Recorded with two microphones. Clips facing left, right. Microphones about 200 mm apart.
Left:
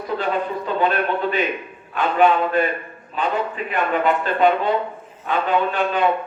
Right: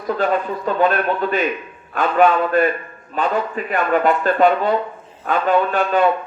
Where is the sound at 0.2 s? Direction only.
45° right (ahead or behind).